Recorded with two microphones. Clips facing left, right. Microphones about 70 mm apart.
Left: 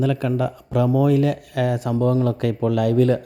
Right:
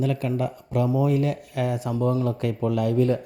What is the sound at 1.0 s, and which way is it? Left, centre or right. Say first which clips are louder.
Speech: left 5 dB; left.